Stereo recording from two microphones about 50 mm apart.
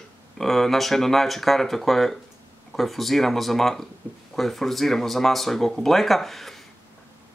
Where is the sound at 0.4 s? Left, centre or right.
Centre.